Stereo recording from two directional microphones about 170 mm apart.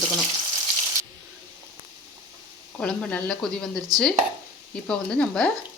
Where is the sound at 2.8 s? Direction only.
5° left (ahead or behind).